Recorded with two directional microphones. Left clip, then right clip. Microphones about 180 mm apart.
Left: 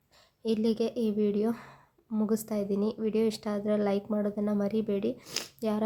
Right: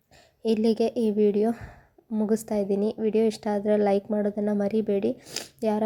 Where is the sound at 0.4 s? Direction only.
20° right (ahead or behind).